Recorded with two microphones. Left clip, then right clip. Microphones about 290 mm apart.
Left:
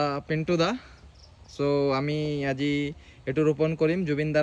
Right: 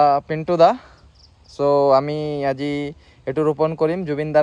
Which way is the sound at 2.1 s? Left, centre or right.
Centre.